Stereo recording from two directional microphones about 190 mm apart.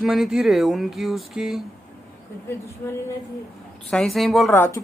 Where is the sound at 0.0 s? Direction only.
Centre (ahead or behind).